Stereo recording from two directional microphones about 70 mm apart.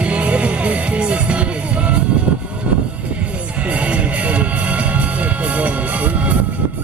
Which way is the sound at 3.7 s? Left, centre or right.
Centre.